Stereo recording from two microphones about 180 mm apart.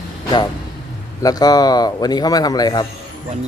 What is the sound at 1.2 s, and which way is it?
A man's voice, 20° left (ahead or behind).